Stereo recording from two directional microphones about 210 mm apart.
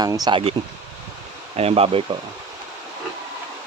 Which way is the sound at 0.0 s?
20° right (ahead or behind).